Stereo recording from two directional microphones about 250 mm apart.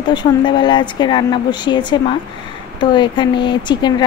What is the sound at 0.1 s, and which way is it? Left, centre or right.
A woman's voice, centre.